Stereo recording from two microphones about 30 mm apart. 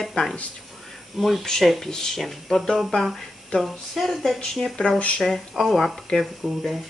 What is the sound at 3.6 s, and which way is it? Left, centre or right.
Speech, centre.